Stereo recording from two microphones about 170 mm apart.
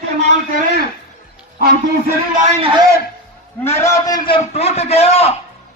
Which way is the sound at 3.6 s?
15° left (ahead or behind).